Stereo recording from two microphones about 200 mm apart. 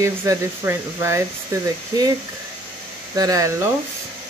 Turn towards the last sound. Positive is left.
turn(degrees=-15)  # may be behind; listen again after turning